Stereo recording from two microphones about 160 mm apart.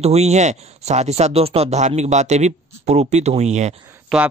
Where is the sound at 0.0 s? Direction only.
40° right (ahead or behind).